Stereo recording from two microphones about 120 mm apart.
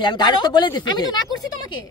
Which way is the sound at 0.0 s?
40° left (ahead or behind).